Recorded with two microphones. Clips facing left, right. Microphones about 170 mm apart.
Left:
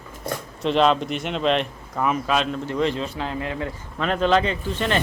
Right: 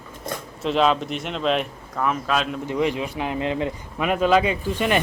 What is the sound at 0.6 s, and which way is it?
Speech, centre (ahead or behind).